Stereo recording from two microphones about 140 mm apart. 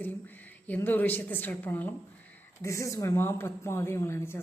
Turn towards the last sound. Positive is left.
turn(degrees=15)  # may be behind; listen again after turning